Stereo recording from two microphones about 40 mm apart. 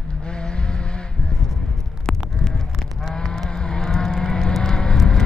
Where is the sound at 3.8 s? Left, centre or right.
Centre.